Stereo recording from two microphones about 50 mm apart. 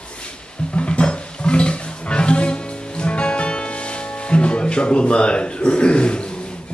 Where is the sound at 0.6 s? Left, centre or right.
Left.